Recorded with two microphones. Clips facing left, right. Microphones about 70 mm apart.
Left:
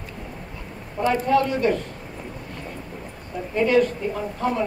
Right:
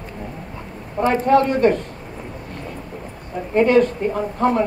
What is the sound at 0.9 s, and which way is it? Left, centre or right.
Speech, right.